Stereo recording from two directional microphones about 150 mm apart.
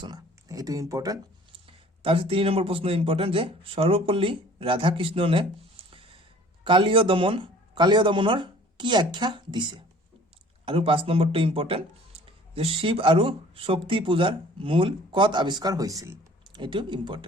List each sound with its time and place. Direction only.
0.0 s speech: 25° right (ahead or behind)
1.6 s speech: 35° right (ahead or behind)
5.8 s gasp: 35° right (ahead or behind)
6.7 s speech: 35° right (ahead or behind)